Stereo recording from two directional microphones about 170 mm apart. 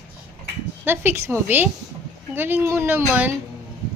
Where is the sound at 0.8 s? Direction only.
10° right (ahead or behind).